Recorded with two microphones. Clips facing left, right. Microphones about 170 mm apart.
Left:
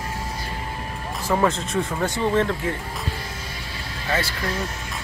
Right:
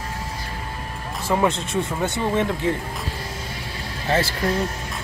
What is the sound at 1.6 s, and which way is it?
Speech, 15° right (ahead or behind).